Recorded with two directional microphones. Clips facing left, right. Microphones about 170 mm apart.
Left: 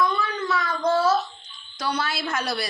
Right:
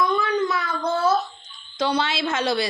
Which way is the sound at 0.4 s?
10° right (ahead or behind).